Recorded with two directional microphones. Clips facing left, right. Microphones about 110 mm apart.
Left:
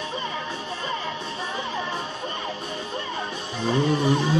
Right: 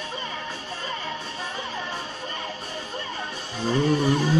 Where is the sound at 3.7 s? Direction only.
15° left (ahead or behind).